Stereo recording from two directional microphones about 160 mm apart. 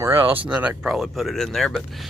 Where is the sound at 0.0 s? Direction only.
15° right (ahead or behind).